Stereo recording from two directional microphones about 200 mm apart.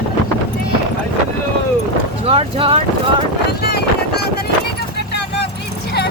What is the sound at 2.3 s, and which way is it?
Vehicle, 30° right (ahead or behind).